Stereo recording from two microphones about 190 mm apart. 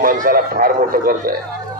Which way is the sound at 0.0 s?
50° right (ahead or behind).